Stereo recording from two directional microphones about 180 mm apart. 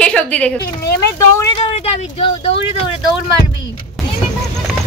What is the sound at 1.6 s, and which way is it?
Speech, 35° left (ahead or behind).